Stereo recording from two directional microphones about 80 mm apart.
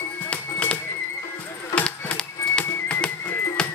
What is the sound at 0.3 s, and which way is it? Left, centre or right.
Music, centre.